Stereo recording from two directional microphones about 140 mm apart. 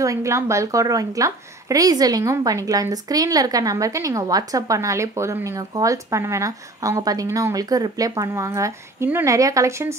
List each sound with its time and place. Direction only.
0.0 s a woman's voice: 20° right (ahead or behind)